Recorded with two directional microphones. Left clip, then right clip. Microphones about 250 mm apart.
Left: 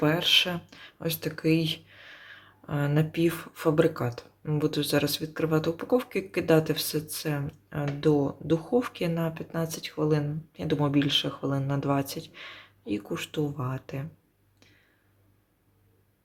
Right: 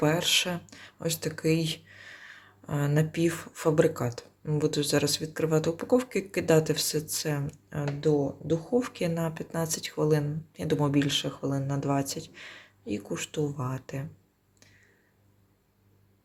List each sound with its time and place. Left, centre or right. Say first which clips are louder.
0.0 s speech: left 2 dB; centre